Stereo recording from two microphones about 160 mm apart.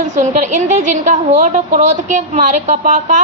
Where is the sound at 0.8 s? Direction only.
55° right (ahead or behind).